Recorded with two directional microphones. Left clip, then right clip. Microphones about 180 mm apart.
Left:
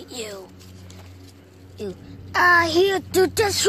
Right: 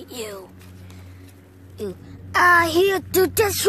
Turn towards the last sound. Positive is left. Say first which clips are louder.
# even
turn(degrees=-10)  # may be behind; listen again after turning